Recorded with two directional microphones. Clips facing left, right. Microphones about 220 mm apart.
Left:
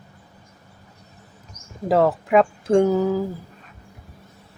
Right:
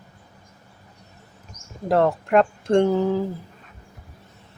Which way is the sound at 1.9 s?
5° left (ahead or behind).